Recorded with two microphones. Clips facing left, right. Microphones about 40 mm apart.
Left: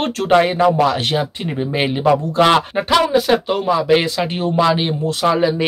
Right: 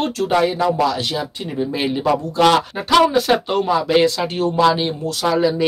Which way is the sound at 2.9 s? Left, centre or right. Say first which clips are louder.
Right 1 dB; centre.